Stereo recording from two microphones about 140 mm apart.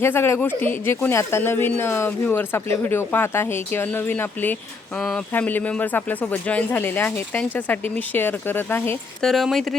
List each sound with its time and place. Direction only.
0.0 s speech: 15° left (ahead or behind)
9.2 s speech: centre (ahead or behind)